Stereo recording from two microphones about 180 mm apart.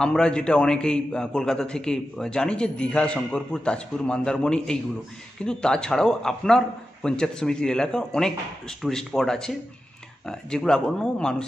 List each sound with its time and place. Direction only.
0.0 s a man's voice: 5° left (ahead or behind)